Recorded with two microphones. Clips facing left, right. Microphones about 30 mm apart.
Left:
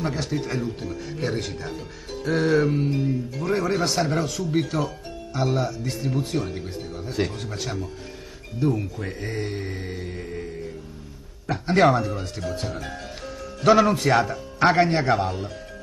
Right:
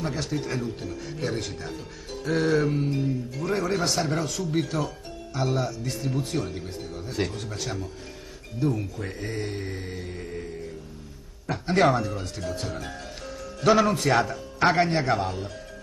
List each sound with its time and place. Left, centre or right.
0.0 s speech: centre